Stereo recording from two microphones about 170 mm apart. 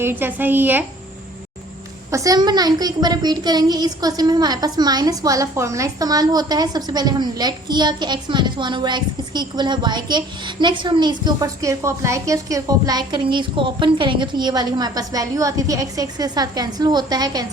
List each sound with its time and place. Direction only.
0.0 s a woman's voice: 10° right (ahead or behind)
2.0 s a woman's voice: 20° right (ahead or behind)